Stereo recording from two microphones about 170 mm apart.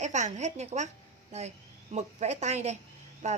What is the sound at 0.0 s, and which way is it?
A woman's voice, 45° right (ahead or behind).